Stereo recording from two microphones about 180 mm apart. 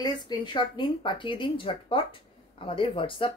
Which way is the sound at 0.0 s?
25° left (ahead or behind).